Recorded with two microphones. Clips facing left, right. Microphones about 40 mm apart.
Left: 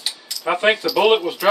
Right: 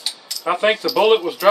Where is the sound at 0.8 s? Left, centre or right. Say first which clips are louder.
Right 1 dB; centre.